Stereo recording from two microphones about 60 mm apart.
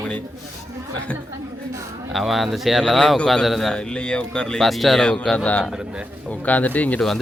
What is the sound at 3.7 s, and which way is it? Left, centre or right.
Speech, centre.